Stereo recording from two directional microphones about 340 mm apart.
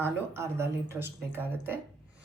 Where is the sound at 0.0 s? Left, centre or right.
Centre.